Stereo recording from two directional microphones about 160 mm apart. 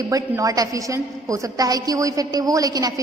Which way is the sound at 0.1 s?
20° right (ahead or behind).